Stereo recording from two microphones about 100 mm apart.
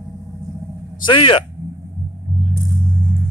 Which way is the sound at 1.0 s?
55° left (ahead or behind).